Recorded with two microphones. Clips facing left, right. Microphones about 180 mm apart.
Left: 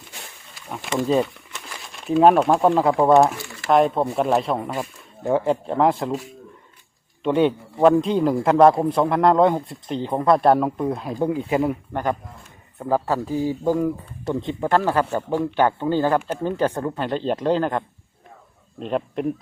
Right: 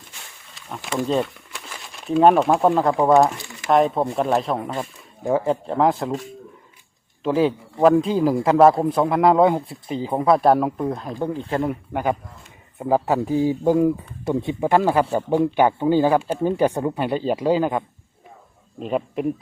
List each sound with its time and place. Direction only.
1.0 s speech: 5° left (ahead or behind)
2.9 s speech: 15° right (ahead or behind)
3.7 s speech: centre (ahead or behind)
11.7 s speech: 10° right (ahead or behind)